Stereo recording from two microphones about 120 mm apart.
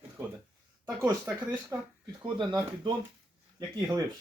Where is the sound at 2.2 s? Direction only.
35° right (ahead or behind).